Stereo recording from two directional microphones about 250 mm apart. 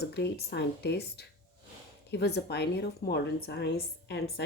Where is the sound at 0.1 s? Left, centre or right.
Left.